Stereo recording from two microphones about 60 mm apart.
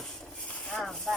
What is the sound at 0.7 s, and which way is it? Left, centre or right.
Vehicle, centre.